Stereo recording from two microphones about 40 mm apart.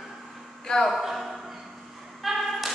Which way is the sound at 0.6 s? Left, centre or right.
Centre.